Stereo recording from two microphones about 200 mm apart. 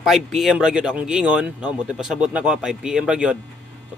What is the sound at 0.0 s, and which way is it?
Speech, centre (ahead or behind).